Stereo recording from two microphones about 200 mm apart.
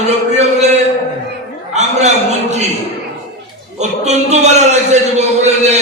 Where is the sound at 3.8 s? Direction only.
35° right (ahead or behind).